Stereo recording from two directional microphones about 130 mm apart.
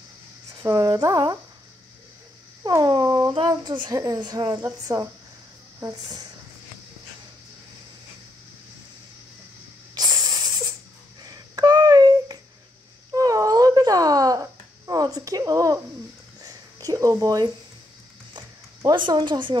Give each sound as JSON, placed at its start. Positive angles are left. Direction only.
{"t": 0.6, "sound": "speech", "side_deg": -30}
{"t": 2.7, "sound": "speech", "side_deg": -30}
{"t": 9.9, "sound": "spray", "side_deg": -30}
{"t": 11.2, "sound": "a sound", "side_deg": -30}
{"t": 18.8, "sound": "speech", "side_deg": -35}